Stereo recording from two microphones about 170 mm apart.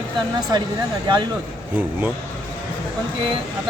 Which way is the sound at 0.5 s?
25° right (ahead or behind).